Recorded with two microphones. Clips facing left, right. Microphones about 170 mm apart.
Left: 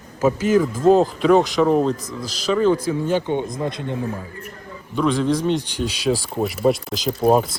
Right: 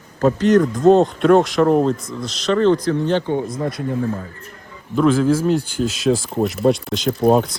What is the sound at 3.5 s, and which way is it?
Speech, 20° left (ahead or behind).